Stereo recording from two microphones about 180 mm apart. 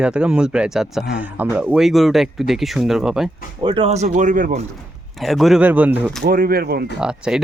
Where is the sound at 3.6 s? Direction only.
30° right (ahead or behind); by 4.6 s 45° right (ahead or behind).